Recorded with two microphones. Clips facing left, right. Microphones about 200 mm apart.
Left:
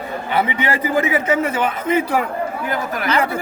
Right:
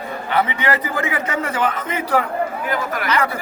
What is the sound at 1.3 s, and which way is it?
Speech, 10° left (ahead or behind).